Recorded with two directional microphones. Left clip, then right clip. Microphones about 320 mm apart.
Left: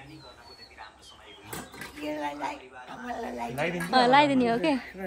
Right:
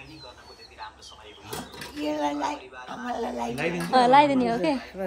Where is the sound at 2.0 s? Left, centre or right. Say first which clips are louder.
Right 6 dB; right.